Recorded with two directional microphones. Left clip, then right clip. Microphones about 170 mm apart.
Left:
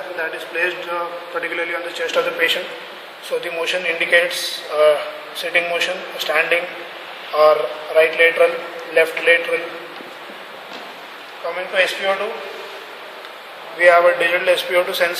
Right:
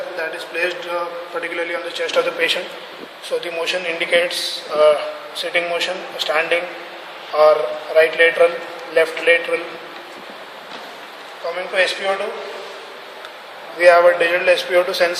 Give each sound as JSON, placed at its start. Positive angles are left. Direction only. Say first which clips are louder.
{"t": 0.2, "sound": "a man's voice", "louder": "left 1 dB", "side_deg": -5}
{"t": 11.7, "sound": "a man's voice", "louder": "even", "side_deg": -5}
{"t": 13.8, "sound": "a man's voice", "louder": "right 1 dB", "side_deg": -20}